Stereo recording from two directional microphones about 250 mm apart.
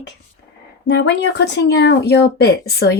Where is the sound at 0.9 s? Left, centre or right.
Left.